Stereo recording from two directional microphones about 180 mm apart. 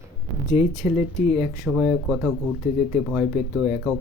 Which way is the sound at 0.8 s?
5° right (ahead or behind).